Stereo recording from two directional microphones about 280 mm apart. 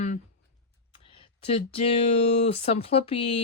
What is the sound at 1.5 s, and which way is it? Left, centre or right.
Speech, left.